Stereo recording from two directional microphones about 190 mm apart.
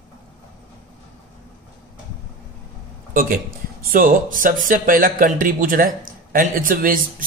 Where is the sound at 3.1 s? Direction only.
45° right (ahead or behind).